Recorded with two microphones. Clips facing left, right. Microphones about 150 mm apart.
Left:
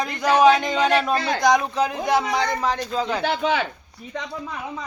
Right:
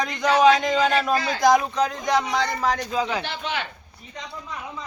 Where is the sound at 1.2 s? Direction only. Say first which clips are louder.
Left 3 dB; 55° left (ahead or behind).